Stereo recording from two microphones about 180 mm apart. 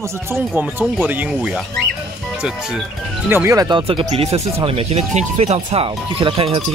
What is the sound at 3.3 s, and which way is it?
Speech, 15° right (ahead or behind).